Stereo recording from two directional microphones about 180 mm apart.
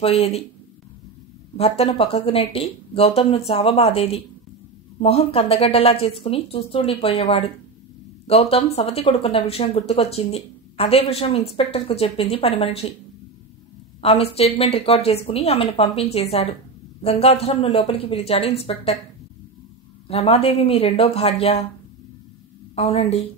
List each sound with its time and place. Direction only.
0.2 s speech: 35° left (ahead or behind)
1.6 s speech: 35° left (ahead or behind)
14.0 s speech: 35° left (ahead or behind)
20.1 s speech: 35° left (ahead or behind)
22.8 s speech: 35° left (ahead or behind)